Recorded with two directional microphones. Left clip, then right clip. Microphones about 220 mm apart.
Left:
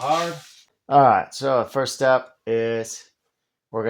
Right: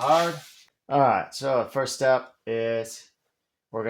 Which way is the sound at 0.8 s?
40° left (ahead or behind).